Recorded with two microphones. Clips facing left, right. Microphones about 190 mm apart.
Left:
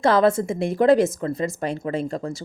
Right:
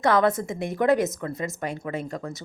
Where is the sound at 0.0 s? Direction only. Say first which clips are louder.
Left 3 dB; 25° left (ahead or behind).